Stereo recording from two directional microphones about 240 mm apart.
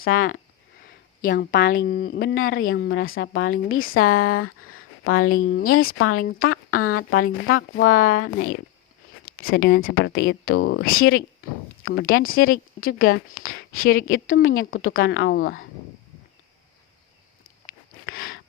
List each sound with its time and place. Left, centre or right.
0.1 s a woman's voice: left
1.2 s a woman's voice: left
2.3 s a woman's voice: left
6.2 s speech: left
6.7 s a woman's voice: left
7.9 s a woman's voice: left
11.0 s a woman's voice: left
13.0 s a woman's voice: left
13.4 s a woman's voice: left